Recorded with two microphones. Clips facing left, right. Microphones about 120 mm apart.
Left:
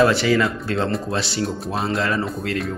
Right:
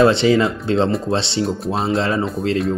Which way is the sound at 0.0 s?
25° right (ahead or behind).